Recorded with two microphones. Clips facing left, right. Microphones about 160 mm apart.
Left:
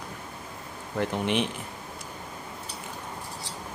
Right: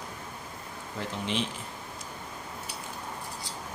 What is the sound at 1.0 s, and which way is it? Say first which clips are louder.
Speech: left 6 dB; 60° left (ahead or behind).